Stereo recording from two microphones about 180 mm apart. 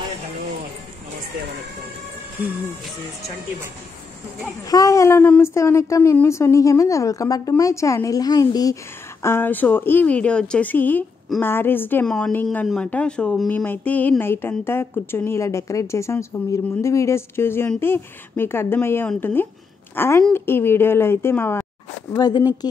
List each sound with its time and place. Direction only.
4.6 s a woman's voice: 20° left (ahead or behind)